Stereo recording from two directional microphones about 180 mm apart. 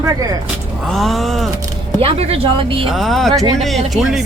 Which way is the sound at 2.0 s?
35° right (ahead or behind).